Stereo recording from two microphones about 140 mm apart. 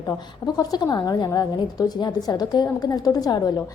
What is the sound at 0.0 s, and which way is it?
A woman's voice, 25° left (ahead or behind).